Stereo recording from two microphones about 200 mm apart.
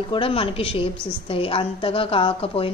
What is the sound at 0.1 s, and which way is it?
A woman's voice, 25° left (ahead or behind).